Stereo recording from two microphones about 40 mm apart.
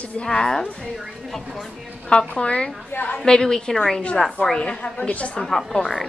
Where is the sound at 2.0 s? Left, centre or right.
Left.